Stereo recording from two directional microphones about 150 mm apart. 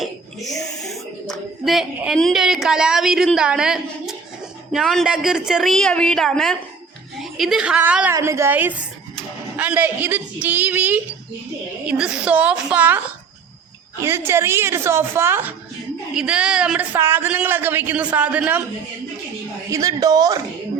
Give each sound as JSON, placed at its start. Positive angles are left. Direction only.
{"t": 0.4, "sound": "a woman's voice", "side_deg": 0}
{"t": 19.7, "sound": "a woman's voice", "side_deg": -25}